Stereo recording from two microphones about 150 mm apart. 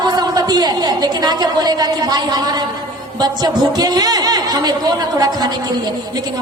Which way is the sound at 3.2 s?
25° right (ahead or behind).